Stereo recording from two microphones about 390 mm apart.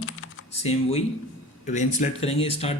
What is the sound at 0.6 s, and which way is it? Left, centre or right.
Speech, centre.